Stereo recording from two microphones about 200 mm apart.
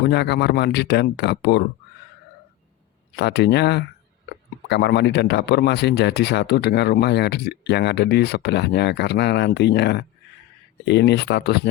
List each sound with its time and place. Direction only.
0.0 s speech: 55° left (ahead or behind)
3.2 s speech: 60° left (ahead or behind)